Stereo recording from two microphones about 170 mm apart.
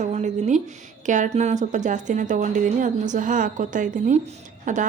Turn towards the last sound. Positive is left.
turn(degrees=-50)  # may be behind; listen again after turning